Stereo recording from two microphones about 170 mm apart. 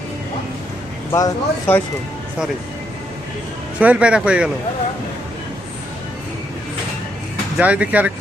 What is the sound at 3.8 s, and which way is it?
Speech, 5° right (ahead or behind).